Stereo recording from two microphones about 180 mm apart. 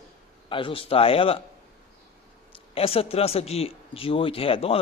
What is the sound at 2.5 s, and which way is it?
A man's voice, 30° left (ahead or behind).